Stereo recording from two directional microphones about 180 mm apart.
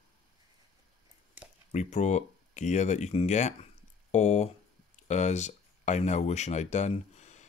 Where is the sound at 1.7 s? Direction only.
40° left (ahead or behind).